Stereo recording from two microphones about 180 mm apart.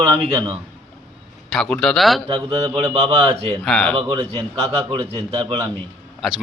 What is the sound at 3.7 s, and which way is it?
Speech, centre (ahead or behind).